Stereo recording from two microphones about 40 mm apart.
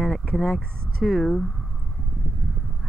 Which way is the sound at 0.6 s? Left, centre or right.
Left.